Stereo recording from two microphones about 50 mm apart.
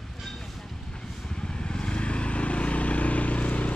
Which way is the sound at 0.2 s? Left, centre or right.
Centre.